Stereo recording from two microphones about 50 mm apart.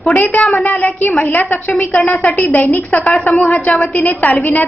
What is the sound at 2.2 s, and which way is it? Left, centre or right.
A woman's voice, left.